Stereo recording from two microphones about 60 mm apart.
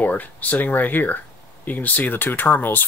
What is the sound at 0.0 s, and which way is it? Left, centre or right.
Speech, left.